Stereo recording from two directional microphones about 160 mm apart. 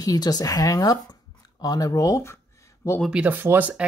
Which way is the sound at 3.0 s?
5° right (ahead or behind).